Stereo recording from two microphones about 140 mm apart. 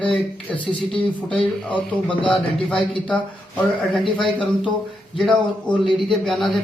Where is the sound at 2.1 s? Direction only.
35° left (ahead or behind).